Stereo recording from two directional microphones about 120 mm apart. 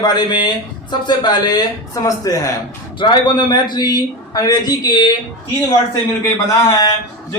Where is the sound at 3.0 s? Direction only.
40° left (ahead or behind).